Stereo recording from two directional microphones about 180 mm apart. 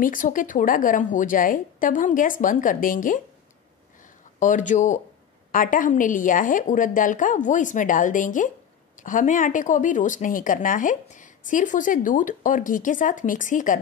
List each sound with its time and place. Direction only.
0.0 s a woman's voice: 45° left (ahead or behind)
4.4 s a woman's voice: 45° left (ahead or behind)